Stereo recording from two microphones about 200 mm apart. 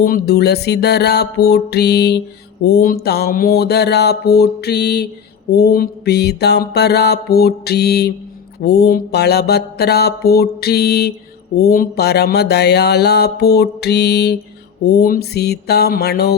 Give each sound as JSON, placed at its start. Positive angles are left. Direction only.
{"t": 0.0, "sound": "speech", "side_deg": 50}
{"t": 2.6, "sound": "mantra", "side_deg": 50}
{"t": 11.5, "sound": "speech", "side_deg": 50}
{"t": 14.8, "sound": "mantra", "side_deg": 50}